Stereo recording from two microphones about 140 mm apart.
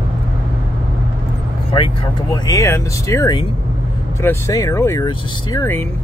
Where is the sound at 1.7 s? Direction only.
35° left (ahead or behind).